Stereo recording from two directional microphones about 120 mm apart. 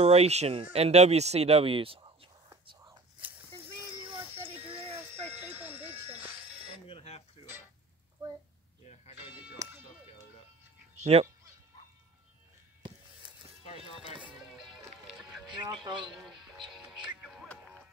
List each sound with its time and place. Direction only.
0.0 s speech: 60° right (ahead or behind)
2.6 s whispering: 40° right (ahead or behind)
3.3 s a sound: 15° right (ahead or behind)
4.6 s a sound: 50° right (ahead or behind)
4.9 s music: 20° right (ahead or behind)
6.9 s a sound: 60° left (ahead or behind)
9.1 s music: 15° right (ahead or behind)
11.0 s speech: 60° right (ahead or behind)
13.8 s music: 50° left (ahead or behind)
15.5 s music: 40° right (ahead or behind)
16.2 s music: centre (ahead or behind)